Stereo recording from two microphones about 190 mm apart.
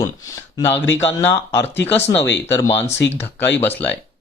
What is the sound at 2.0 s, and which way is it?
Speech, 65° left (ahead or behind).